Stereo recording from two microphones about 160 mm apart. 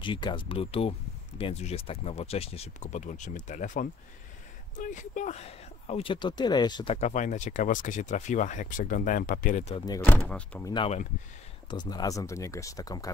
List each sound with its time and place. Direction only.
0.0 s speech: 30° left (ahead or behind)
7.1 s speech: 50° left (ahead or behind)
9.8 s speech: 25° left (ahead or behind)
10.2 s speech: 5° left (ahead or behind)
10.6 s speech: 30° left (ahead or behind)